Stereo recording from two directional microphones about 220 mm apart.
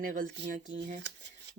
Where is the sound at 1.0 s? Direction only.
55° right (ahead or behind).